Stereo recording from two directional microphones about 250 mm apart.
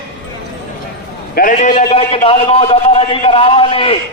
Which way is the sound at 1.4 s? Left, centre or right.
Left.